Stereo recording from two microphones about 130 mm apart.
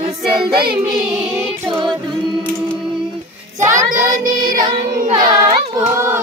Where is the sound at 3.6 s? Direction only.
25° right (ahead or behind).